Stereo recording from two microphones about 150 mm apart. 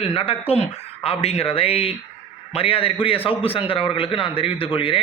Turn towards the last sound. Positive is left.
turn(degrees=35)  # may be behind; listen again after turning